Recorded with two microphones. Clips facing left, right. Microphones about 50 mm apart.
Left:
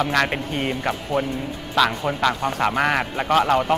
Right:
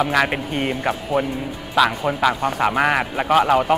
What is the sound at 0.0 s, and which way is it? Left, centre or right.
Speech, centre.